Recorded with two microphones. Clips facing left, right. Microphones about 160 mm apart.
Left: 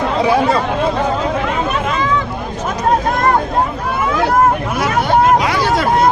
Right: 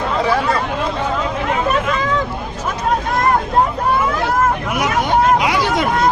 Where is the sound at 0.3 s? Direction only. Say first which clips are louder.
Left 5 dB; 25° left (ahead or behind).